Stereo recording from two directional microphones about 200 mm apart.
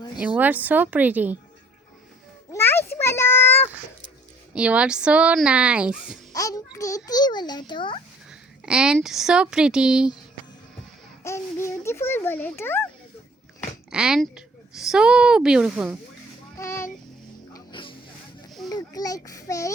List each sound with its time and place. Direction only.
0.2 s speech: 10° right (ahead or behind)
2.5 s a sound: 10° left (ahead or behind)
4.5 s speech: 5° right (ahead or behind)
6.3 s a child's voice: 15° left (ahead or behind)
8.3 s a woman's voice: 5° right (ahead or behind)
11.2 s a child's voice: 15° left (ahead or behind)
13.9 s speech: 5° right (ahead or behind)
16.6 s a child's voice: 15° left (ahead or behind)
17.5 s vehicle: 25° left (ahead or behind)
18.7 s a child's voice: 20° left (ahead or behind)